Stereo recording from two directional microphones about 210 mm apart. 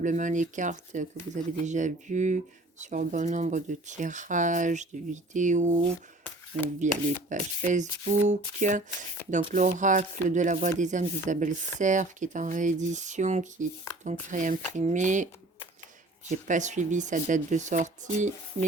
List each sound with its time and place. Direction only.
0.0 s speech: 35° right (ahead or behind)
16.3 s speech: 35° right (ahead or behind)